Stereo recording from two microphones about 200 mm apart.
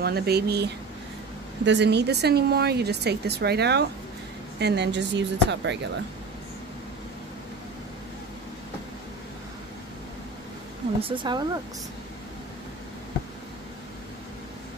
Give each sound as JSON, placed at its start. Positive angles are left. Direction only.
{"t": 0.0, "sound": "speech", "side_deg": -55}
{"t": 11.0, "sound": "speech", "side_deg": -25}